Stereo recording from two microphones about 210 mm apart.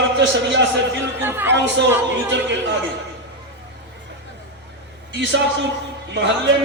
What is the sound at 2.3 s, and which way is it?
Speech, 60° right (ahead or behind).